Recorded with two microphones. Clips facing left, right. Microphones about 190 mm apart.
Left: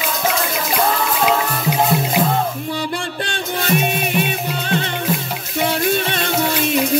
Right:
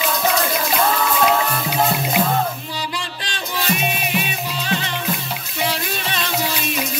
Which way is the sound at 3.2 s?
55° left (ahead or behind).